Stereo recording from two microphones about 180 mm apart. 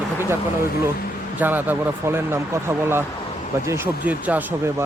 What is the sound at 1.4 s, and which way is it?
Speech, 10° right (ahead or behind).